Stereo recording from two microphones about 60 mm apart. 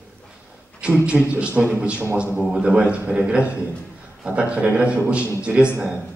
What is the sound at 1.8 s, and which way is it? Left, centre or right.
A man's voice, centre.